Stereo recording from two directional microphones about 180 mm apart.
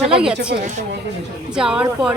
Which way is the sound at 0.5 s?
65° right (ahead or behind).